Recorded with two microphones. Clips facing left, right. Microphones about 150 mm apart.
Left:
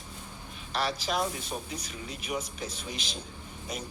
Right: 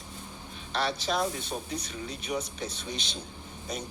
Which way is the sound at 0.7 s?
35° right (ahead or behind).